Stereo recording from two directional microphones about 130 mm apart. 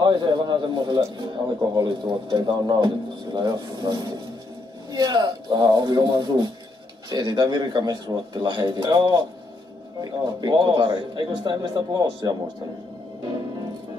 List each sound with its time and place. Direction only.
0.0 s a man's voice: 35° right (ahead or behind)